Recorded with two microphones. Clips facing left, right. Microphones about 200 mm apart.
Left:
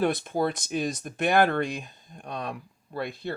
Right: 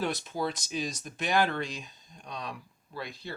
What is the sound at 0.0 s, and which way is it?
Speech, 55° left (ahead or behind).